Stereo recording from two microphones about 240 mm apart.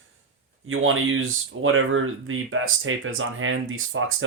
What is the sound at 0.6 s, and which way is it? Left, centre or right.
Speech, right.